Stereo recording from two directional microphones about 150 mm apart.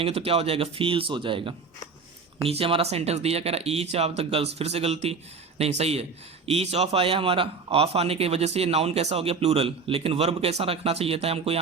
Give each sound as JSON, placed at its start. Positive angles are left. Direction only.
{"t": 0.0, "sound": "a man's voice", "side_deg": -40}